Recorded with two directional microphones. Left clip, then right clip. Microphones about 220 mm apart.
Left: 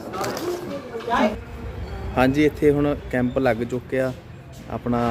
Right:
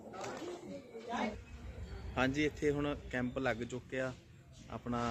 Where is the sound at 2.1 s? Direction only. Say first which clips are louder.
Left 15 dB; 5° left (ahead or behind).